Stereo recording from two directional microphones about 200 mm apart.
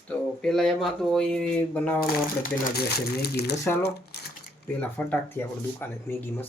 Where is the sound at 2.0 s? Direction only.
50° left (ahead or behind).